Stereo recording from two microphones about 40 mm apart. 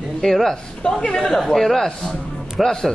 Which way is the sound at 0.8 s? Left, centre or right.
Left.